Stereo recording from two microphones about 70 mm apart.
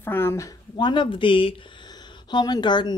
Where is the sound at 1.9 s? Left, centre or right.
Left.